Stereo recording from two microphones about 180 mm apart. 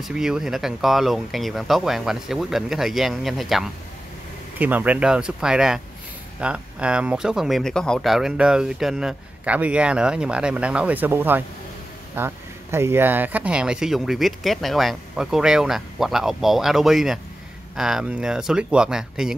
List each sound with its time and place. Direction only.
0.0 s speech: 5° right (ahead or behind)